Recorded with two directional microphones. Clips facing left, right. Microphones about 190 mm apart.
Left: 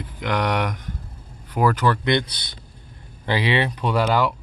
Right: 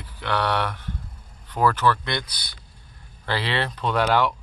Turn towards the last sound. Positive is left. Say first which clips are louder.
# left 1 dB
turn(degrees=0)  # may be behind; listen again after turning